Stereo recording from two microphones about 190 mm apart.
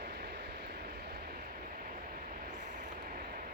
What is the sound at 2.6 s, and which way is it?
Vehicle, 40° right (ahead or behind).